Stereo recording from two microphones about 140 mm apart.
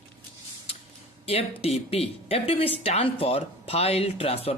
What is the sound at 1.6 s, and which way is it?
Speech, 45° left (ahead or behind).